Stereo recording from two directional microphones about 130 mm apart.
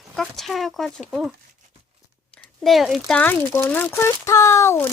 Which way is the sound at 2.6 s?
Centre (ahead or behind).